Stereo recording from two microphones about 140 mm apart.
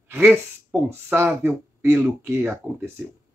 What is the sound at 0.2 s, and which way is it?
Speech, 5° right (ahead or behind).